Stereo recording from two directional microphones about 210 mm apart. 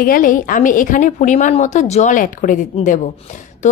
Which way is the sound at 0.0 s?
40° left (ahead or behind).